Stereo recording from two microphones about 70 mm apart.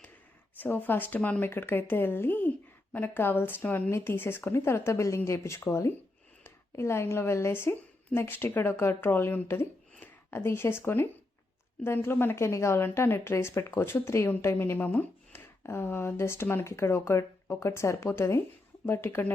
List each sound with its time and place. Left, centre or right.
0.6 s speech: left